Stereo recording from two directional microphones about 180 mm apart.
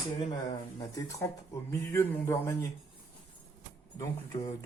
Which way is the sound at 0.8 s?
20° left (ahead or behind).